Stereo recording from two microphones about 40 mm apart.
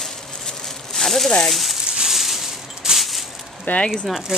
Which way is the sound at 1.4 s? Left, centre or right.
Centre.